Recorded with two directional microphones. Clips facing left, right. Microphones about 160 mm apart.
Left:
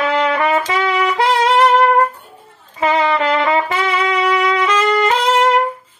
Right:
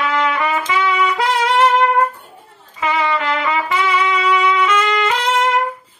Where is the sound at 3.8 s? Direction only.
30° left (ahead or behind).